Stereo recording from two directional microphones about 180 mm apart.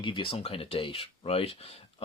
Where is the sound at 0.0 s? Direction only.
30° left (ahead or behind).